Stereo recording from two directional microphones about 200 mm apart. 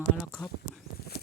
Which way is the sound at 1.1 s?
50° left (ahead or behind).